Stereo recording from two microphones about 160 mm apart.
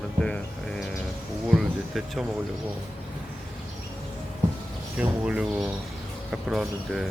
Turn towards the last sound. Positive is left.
turn(degrees=0)  # may be behind; listen again after turning